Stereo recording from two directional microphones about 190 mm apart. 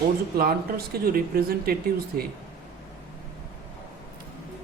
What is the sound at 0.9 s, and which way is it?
Speech, 50° right (ahead or behind).